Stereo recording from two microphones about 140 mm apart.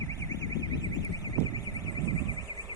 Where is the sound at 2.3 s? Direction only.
30° right (ahead or behind).